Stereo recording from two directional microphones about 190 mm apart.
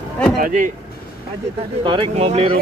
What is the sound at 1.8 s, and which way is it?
Speech, 30° right (ahead or behind).